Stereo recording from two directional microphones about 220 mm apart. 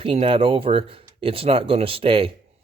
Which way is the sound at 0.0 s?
25° right (ahead or behind).